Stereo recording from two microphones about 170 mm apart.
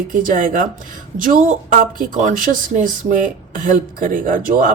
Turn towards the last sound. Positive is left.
turn(degrees=-55)  # may be behind; listen again after turning